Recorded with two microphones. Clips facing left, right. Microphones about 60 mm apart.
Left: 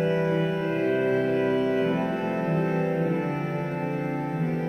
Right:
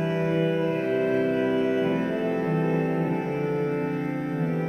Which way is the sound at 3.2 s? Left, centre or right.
Centre.